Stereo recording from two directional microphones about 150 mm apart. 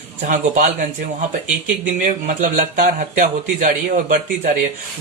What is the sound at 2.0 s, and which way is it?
Speech, 60° right (ahead or behind).